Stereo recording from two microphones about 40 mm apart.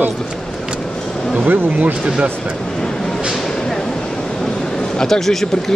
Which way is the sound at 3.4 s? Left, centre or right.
Centre.